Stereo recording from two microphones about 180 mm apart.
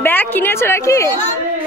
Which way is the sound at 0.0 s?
10° left (ahead or behind).